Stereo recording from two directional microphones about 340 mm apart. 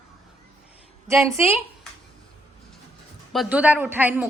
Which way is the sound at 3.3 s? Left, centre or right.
Centre.